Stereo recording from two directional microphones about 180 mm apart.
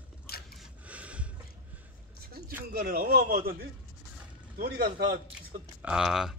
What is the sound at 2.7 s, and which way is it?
Speech, 60° right (ahead or behind).